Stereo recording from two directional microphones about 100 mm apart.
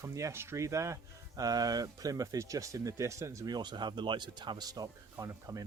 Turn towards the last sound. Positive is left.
turn(degrees=-30)  # may be behind; listen again after turning